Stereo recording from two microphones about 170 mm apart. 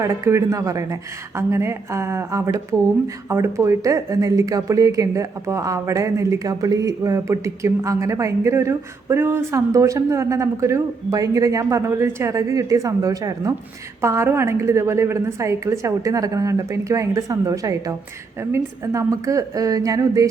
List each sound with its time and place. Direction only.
0.0 s a woman's voice: 15° right (ahead or behind)